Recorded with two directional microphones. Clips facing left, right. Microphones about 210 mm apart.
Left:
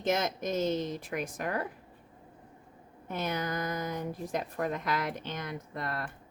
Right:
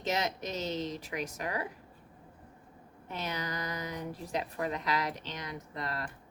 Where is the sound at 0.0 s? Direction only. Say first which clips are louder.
Left 3 dB; 50° left (ahead or behind).